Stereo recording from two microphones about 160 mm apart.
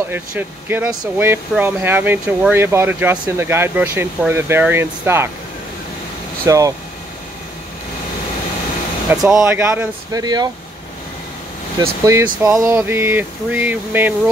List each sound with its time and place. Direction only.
0.1 s speech: 15° right (ahead or behind)
6.4 s speech: 20° right (ahead or behind)
9.2 s speech: 5° right (ahead or behind)
10.1 s speech: 25° right (ahead or behind)
11.8 s speech: 20° right (ahead or behind)